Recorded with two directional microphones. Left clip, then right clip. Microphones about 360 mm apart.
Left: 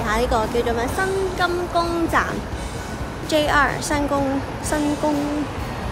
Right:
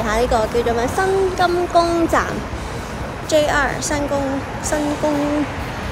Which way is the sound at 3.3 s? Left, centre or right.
Centre.